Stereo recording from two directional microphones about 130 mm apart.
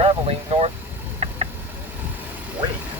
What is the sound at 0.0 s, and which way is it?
Vehicle, 50° right (ahead or behind).